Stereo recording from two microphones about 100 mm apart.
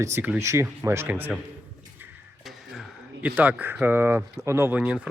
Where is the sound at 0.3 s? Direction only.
30° right (ahead or behind).